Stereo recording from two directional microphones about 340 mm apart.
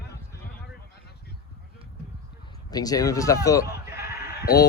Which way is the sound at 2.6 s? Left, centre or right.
Centre.